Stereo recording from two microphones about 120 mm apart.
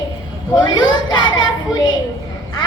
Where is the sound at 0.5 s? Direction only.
35° left (ahead or behind).